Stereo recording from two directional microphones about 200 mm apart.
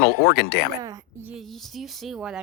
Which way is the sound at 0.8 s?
15° right (ahead or behind).